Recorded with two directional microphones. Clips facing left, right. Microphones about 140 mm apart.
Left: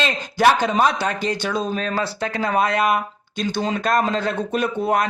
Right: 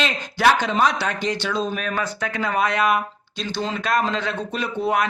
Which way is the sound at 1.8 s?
30° left (ahead or behind).